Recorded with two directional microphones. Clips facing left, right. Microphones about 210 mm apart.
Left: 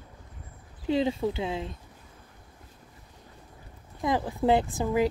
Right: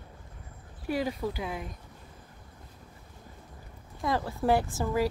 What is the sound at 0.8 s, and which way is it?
Speech, 25° left (ahead or behind).